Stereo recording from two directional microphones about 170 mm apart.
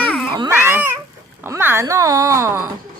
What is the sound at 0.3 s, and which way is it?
Cat, 15° right (ahead or behind).